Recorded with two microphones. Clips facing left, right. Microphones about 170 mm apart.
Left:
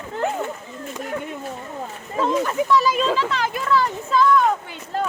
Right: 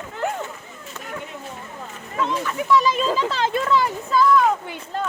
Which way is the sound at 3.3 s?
25° right (ahead or behind).